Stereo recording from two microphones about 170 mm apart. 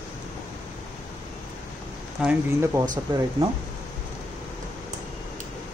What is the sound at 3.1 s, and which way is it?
Speech, 25° right (ahead or behind).